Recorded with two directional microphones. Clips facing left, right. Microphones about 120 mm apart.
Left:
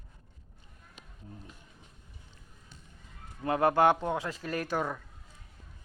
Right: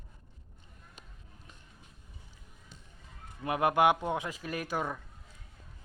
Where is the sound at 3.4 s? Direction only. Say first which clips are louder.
Left 2 dB; 15° right (ahead or behind).